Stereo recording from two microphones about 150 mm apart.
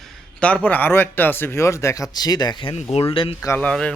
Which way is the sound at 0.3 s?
10° left (ahead or behind).